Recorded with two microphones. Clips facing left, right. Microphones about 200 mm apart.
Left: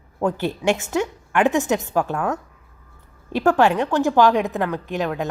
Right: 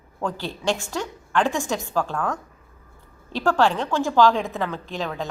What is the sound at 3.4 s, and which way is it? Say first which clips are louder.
A woman's voice: left 3 dB; 20° left (ahead or behind).